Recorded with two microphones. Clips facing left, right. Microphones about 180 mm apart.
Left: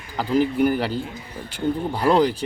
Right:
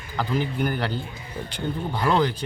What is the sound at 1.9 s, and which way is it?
Speech, 35° left (ahead or behind).